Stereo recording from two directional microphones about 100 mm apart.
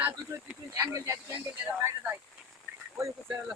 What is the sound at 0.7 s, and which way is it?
Speech, 25° right (ahead or behind).